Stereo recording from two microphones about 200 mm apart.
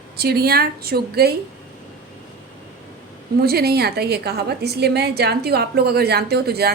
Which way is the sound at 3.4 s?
50° right (ahead or behind).